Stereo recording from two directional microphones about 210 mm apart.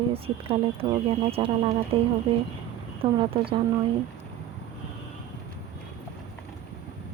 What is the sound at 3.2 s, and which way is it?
Speech, 25° right (ahead or behind).